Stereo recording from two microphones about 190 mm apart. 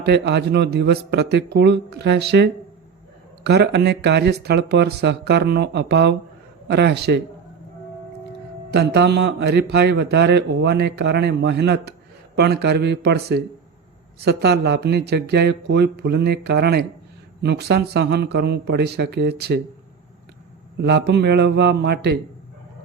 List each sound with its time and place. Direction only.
0.0 s speech: 60° right (ahead or behind)
8.7 s speech: 60° right (ahead or behind)
20.8 s speech: 60° right (ahead or behind)